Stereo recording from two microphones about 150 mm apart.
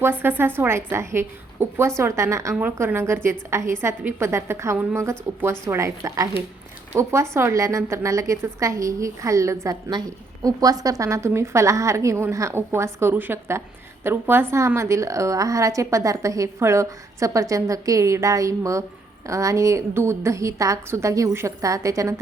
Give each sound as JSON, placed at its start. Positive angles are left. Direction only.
{"t": 0.0, "sound": "a woman's voice", "side_deg": -15}